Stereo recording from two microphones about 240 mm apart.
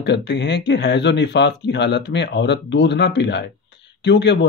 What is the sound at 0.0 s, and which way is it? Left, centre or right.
Speech, left.